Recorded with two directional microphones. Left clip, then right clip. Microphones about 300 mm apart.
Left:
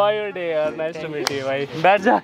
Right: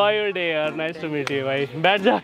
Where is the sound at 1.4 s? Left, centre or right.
Right.